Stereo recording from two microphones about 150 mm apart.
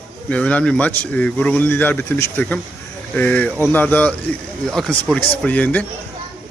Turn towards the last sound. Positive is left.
turn(degrees=10)  # may be behind; listen again after turning